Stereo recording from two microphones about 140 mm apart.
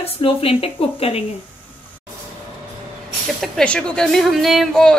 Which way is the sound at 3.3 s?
5° left (ahead or behind).